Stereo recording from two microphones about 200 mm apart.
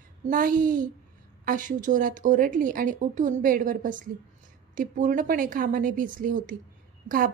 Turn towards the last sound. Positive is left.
turn(degrees=-45)  # may be behind; listen again after turning